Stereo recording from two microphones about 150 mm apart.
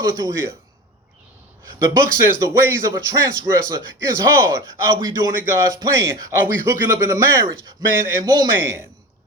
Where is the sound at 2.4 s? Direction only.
20° right (ahead or behind).